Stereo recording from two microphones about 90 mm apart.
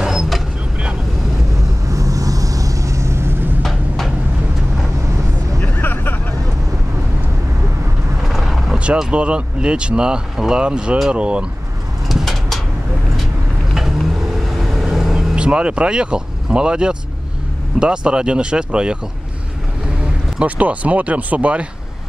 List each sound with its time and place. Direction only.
0.0 s vehicle: 5° right (ahead or behind)
1.9 s vehicle: 40° right (ahead or behind)
3.6 s a sound: 5° left (ahead or behind)
5.6 s hubbub: 20° left (ahead or behind)
8.3 s vehicle: centre (ahead or behind)
8.7 s speech: 15° right (ahead or behind)
12.1 s bird: centre (ahead or behind)
14.6 s vehicle: centre (ahead or behind)
17.7 s speech: 10° right (ahead or behind)
20.3 s speech: 15° right (ahead or behind)